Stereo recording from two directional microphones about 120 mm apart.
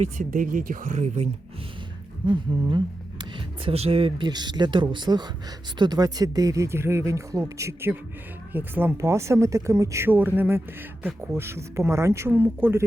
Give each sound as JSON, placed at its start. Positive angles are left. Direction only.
{"t": 0.0, "sound": "speech", "side_deg": -90}
{"t": 0.9, "sound": "speech", "side_deg": -70}
{"t": 2.2, "sound": "speech", "side_deg": -45}
{"t": 4.3, "sound": "speech", "side_deg": -35}